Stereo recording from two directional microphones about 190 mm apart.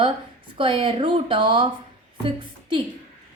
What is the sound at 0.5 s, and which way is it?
A woman's voice, 25° right (ahead or behind).